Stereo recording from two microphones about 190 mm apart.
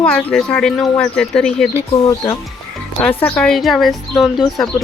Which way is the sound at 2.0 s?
20° left (ahead or behind).